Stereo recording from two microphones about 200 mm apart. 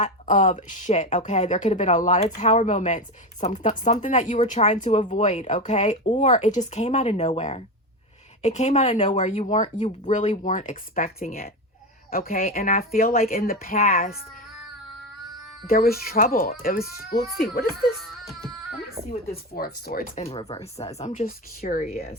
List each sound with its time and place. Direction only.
0.0 s speech: 40° left (ahead or behind)
15.6 s speech: 50° left (ahead or behind)
18.0 s music: centre (ahead or behind)
19.5 s speech: 50° left (ahead or behind)
20.3 s speech: 30° left (ahead or behind)
21.1 s speech: 45° left (ahead or behind)